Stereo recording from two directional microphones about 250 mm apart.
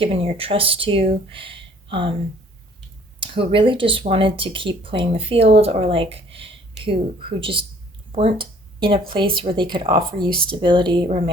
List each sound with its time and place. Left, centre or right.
0.0 s speech: right
3.2 s speech: right